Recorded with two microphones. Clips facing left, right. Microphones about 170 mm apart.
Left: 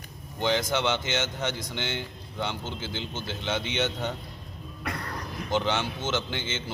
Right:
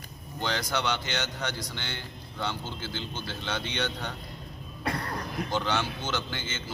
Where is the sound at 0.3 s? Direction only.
20° left (ahead or behind).